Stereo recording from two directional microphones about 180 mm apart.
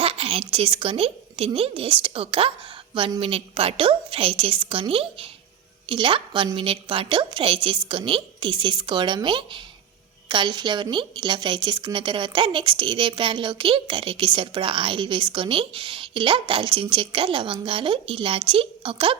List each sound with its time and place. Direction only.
0.0 s a woman's voice: 30° right (ahead or behind)